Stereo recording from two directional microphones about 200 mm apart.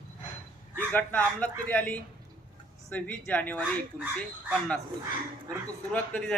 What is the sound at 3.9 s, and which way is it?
Speech, 5° right (ahead or behind).